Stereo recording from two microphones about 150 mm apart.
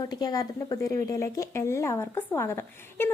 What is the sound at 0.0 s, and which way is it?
Speech, 25° left (ahead or behind).